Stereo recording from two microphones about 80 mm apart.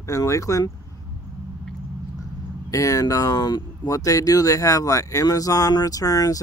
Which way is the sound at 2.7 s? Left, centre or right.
Left.